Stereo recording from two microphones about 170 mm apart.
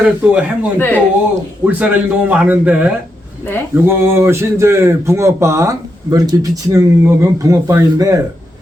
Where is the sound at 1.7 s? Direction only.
10° right (ahead or behind).